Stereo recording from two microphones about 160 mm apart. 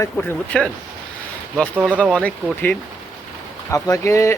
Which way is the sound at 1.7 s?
10° right (ahead or behind).